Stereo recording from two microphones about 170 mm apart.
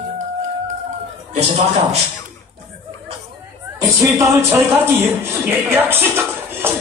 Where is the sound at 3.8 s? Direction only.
20° right (ahead or behind).